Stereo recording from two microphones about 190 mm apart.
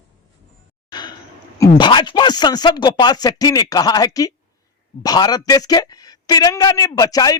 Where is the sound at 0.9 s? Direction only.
20° left (ahead or behind).